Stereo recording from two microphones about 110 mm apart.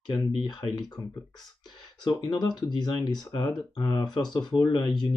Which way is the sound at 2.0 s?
40° left (ahead or behind).